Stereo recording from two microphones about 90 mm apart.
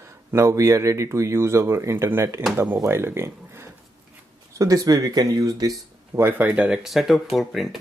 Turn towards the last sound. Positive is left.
turn(degrees=0)  # may be behind; listen again after turning